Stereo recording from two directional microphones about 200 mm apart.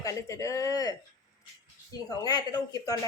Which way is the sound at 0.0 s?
15° left (ahead or behind).